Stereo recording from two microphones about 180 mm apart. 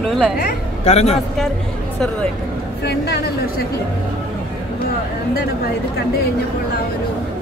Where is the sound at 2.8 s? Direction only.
65° left (ahead or behind).